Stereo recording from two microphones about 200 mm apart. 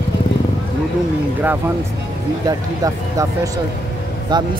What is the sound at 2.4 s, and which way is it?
Speech, 15° right (ahead or behind).